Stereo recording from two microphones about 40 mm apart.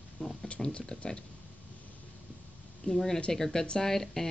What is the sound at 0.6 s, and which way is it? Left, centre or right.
Speech, centre.